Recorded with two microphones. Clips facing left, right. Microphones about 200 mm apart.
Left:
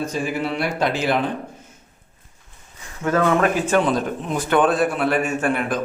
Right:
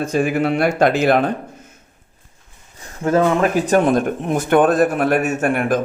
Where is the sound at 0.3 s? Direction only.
50° right (ahead or behind).